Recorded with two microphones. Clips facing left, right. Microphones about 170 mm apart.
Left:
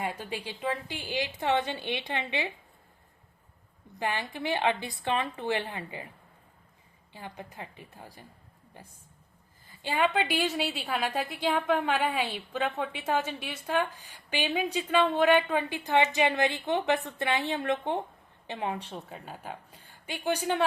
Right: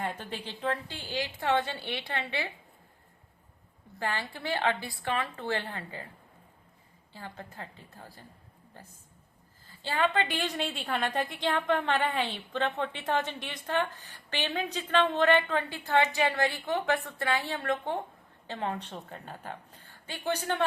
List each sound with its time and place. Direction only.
0.0 s a woman's voice: 10° left (ahead or behind)
4.0 s a woman's voice: 15° left (ahead or behind)
7.1 s a woman's voice: 15° left (ahead or behind)
9.6 s a woman's voice: 15° left (ahead or behind)